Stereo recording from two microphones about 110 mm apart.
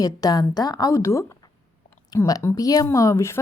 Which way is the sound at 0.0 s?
35° left (ahead or behind).